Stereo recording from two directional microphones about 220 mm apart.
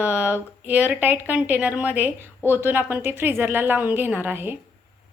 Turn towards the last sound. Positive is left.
turn(degrees=-10)  # may be behind; listen again after turning